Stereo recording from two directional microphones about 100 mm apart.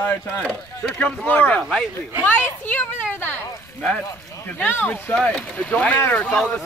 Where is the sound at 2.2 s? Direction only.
20° left (ahead or behind).